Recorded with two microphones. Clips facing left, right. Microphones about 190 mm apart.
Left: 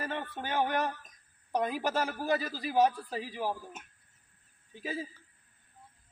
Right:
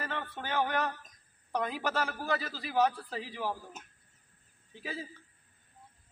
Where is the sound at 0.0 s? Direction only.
15° left (ahead or behind).